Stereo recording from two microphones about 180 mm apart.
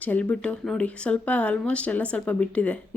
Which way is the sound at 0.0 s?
10° left (ahead or behind).